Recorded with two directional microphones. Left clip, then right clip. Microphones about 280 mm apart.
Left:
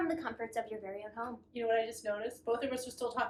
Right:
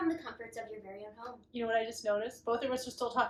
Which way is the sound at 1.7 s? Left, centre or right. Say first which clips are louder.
Right 1 dB; centre.